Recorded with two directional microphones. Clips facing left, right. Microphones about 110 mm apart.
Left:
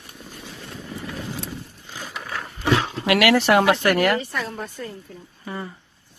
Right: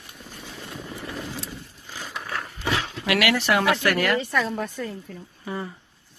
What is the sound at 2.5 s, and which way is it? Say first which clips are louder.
Dog: left 7 dB; 45° left (ahead or behind).